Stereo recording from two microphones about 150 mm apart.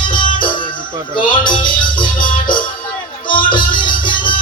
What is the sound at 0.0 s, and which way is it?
Music, 30° left (ahead or behind).